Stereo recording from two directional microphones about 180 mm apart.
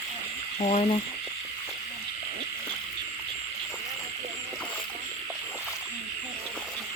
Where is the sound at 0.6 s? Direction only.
35° left (ahead or behind).